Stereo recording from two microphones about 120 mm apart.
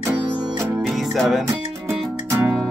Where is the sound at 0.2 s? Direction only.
35° right (ahead or behind).